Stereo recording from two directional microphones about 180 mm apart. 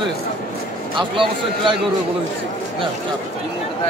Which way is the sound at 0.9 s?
25° right (ahead or behind).